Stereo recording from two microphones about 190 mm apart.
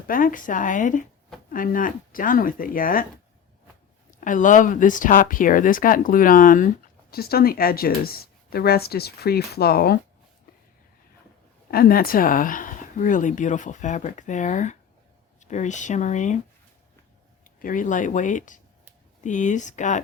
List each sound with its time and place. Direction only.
0.1 s speech: 45° left (ahead or behind)
4.2 s speech: 45° left (ahead or behind)
11.7 s speech: 55° left (ahead or behind)
17.6 s speech: 45° left (ahead or behind)